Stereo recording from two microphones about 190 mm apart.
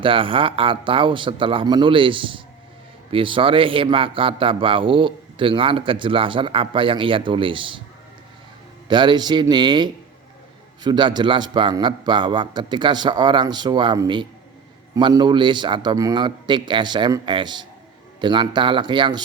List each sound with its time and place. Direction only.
0.0 s a man's voice: 25° right (ahead or behind)
8.9 s a man's voice: 25° right (ahead or behind)